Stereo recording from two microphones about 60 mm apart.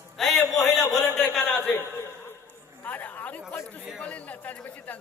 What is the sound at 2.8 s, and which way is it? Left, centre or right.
Chatter, left.